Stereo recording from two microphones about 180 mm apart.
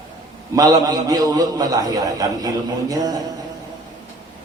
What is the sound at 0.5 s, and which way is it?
A man's voice, 20° right (ahead or behind).